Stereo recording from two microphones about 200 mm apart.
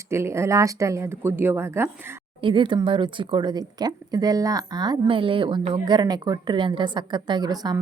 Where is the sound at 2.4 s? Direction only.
25° right (ahead or behind).